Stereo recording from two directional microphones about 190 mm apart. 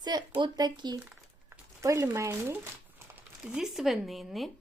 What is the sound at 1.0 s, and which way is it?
Crumpling, 10° right (ahead or behind).